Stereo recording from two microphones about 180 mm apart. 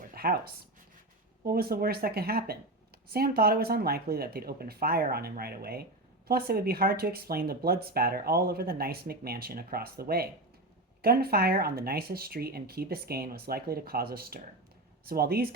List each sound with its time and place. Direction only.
0.1 s speech: 55° right (ahead or behind)